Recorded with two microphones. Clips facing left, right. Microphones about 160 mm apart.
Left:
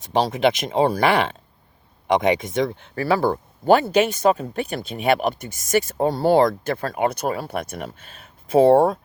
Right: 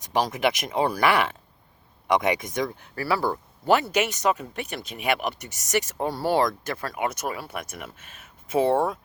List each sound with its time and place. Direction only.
0.0 s speech: 25° left (ahead or behind)